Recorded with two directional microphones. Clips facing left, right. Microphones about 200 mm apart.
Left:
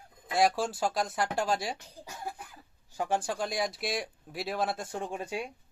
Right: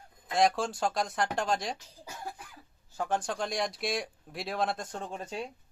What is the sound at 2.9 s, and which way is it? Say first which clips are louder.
Speech: left 1 dB; 15° left (ahead or behind).